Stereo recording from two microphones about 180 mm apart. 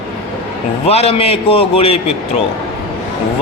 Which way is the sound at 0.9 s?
35° left (ahead or behind).